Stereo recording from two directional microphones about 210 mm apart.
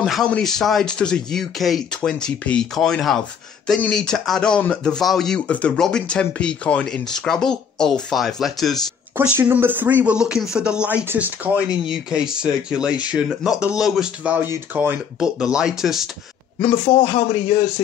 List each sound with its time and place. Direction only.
0.0 s speech: centre (ahead or behind)
16.6 s speech: 25° left (ahead or behind)